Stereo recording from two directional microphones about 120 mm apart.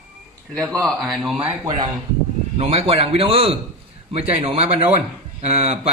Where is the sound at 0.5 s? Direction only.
10° left (ahead or behind).